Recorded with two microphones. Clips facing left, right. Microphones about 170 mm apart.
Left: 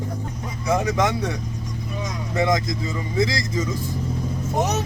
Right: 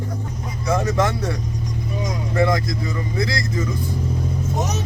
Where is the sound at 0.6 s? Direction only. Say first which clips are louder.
Right 1 dB; 15° left (ahead or behind).